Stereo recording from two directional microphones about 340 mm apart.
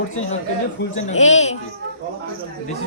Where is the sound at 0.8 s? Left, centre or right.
Centre.